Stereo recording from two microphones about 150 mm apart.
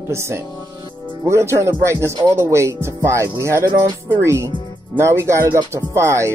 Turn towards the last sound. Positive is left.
turn(degrees=-20)  # may be behind; listen again after turning